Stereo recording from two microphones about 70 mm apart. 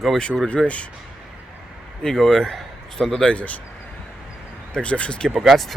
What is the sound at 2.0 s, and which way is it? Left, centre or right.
A man's voice, centre.